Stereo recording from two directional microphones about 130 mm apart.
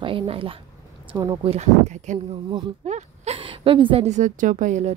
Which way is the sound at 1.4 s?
55° right (ahead or behind).